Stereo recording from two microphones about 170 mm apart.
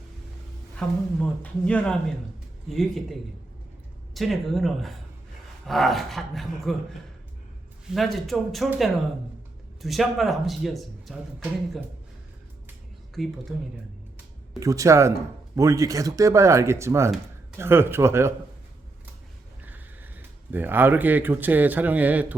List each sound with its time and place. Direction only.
0.8 s speech: 5° left (ahead or behind)
7.9 s speech: centre (ahead or behind)
13.2 s speech: centre (ahead or behind)
14.6 s speech: 20° right (ahead or behind)
19.6 s speech: 10° right (ahead or behind)